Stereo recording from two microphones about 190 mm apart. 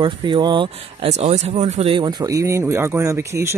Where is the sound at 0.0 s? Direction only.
25° right (ahead or behind).